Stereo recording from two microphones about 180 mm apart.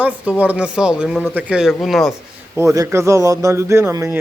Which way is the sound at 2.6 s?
15° right (ahead or behind).